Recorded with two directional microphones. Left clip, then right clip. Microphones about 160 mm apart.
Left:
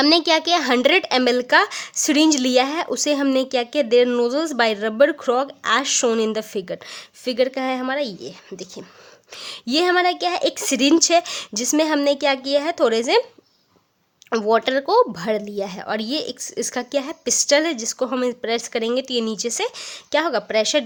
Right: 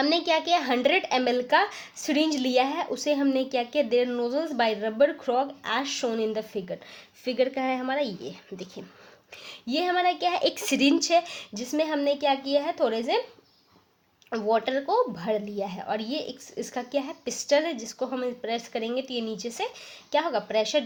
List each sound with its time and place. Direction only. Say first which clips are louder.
0.0 s a woman's voice: left 7 dB; 45° left (ahead or behind)
9.4 s a woman's voice: left 8 dB; 50° left (ahead or behind)
14.3 s a woman's voice: left 7 dB; 55° left (ahead or behind)